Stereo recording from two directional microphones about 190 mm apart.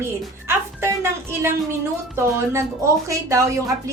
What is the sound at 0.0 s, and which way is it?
Music, 15° right (ahead or behind).